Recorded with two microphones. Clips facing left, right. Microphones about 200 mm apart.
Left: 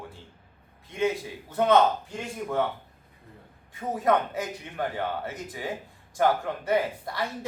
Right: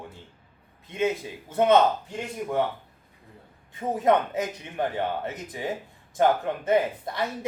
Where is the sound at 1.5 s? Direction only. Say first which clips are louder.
Right 2 dB; 20° right (ahead or behind).